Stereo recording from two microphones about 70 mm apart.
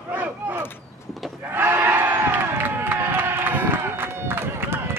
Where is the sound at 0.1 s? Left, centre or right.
Right.